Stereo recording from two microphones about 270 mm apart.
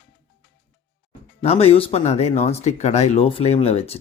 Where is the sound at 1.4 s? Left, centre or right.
Left.